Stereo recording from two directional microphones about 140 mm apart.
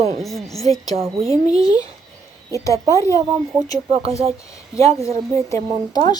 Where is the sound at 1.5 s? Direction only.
25° left (ahead or behind).